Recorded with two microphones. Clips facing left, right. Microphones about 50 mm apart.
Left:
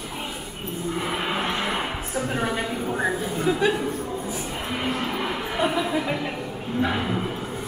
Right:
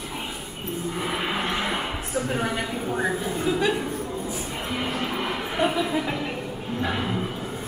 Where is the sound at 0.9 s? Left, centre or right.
Centre.